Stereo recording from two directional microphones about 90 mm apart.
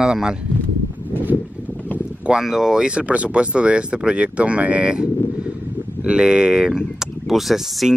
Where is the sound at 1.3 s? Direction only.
20° left (ahead or behind).